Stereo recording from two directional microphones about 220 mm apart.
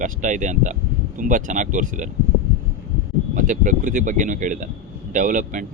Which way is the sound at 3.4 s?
35° right (ahead or behind).